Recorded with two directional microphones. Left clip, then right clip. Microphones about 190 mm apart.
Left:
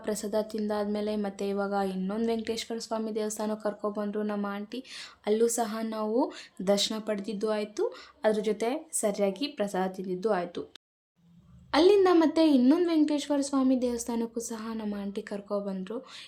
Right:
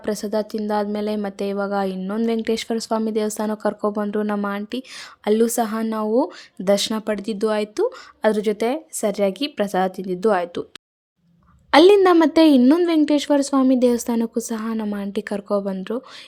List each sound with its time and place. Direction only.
0.0 s speech: 30° right (ahead or behind)
11.7 s a woman's voice: 45° right (ahead or behind)